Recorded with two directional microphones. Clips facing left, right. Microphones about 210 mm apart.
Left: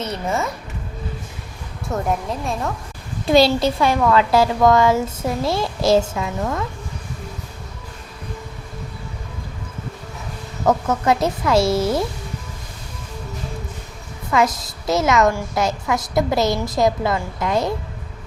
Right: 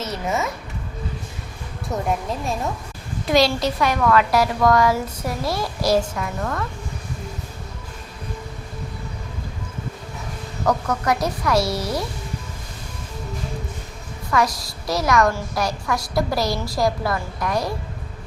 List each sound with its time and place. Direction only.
0.0 s speech: centre (ahead or behind)
1.9 s speech: centre (ahead or behind)
3.2 s a woman's voice: 30° left (ahead or behind)
10.7 s a woman's voice: 25° left (ahead or behind)
14.3 s a woman's voice: 20° left (ahead or behind)